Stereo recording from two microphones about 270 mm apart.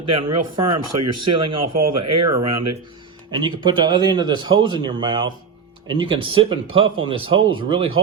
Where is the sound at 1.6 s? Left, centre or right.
Right.